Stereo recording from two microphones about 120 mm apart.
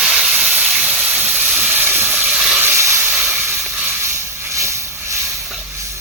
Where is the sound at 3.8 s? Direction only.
20° right (ahead or behind).